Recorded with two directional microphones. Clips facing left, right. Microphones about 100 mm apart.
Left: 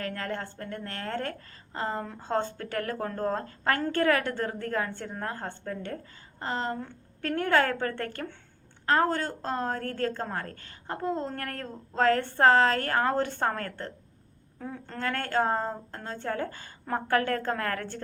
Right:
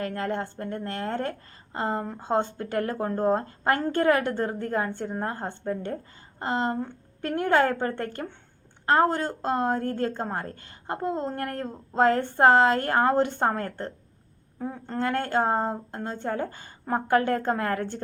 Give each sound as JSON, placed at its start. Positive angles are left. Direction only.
{"t": 0.0, "sound": "a woman's voice", "side_deg": -25}